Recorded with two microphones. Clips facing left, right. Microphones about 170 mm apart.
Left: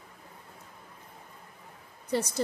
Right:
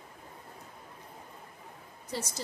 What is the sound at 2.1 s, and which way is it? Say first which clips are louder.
Speech: left 9 dB; 60° left (ahead or behind).